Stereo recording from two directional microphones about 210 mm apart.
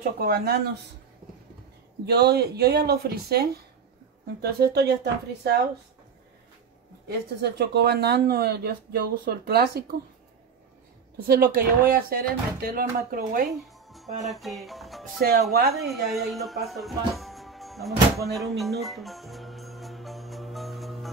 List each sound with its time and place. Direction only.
0.0 s speech: 45° right (ahead or behind)
2.0 s speech: 50° right (ahead or behind)
7.1 s speech: 50° right (ahead or behind)
11.2 s speech: 45° right (ahead or behind)
13.8 s music: centre (ahead or behind)
14.3 s speech: centre (ahead or behind)
18.2 s music: centre (ahead or behind)